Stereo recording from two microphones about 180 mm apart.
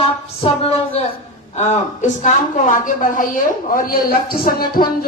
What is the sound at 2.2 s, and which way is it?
A woman's voice, 45° left (ahead or behind).